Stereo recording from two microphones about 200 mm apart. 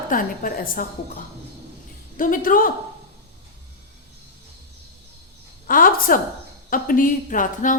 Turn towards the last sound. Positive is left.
turn(degrees=40)  # may be behind; listen again after turning